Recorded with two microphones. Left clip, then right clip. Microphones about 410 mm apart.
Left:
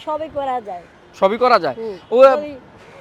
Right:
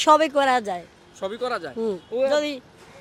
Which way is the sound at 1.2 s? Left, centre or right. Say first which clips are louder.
Left 14 dB; left.